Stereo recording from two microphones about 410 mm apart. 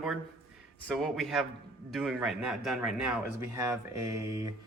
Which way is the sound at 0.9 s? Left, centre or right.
Centre.